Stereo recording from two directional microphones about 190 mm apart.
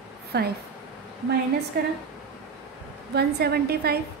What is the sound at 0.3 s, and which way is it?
Speech, 60° right (ahead or behind).